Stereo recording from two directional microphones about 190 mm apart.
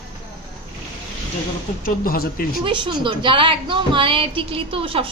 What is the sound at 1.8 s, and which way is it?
Speech, 50° left (ahead or behind).